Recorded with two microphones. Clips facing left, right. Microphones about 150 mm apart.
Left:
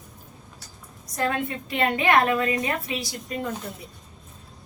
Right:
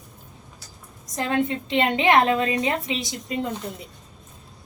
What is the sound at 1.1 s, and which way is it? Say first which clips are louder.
A woman's voice: right 3 dB; 20° right (ahead or behind).